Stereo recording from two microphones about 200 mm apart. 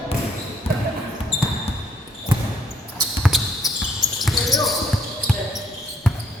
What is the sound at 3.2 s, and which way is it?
Basketball bounce, centre (ahead or behind).